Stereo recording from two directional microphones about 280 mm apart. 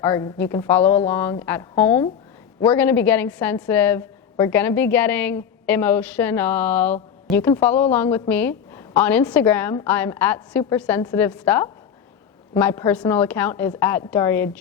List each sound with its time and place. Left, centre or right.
0.0 s a woman's voice: centre